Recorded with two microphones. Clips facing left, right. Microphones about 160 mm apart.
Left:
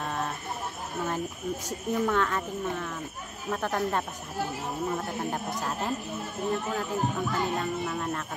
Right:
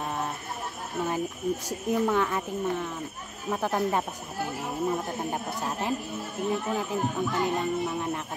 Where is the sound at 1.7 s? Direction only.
15° right (ahead or behind).